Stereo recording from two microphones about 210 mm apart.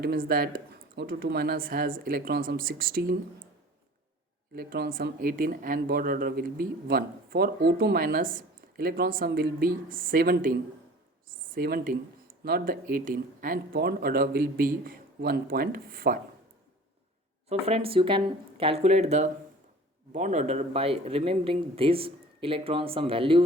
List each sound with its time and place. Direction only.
0.0 s speech: 45° right (ahead or behind)
4.5 s speech: 45° right (ahead or behind)
17.5 s speech: 30° right (ahead or behind)